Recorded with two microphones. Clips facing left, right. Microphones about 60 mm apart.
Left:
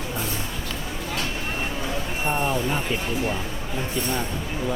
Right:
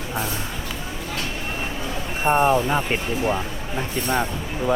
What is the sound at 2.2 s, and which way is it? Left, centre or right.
Speech, right.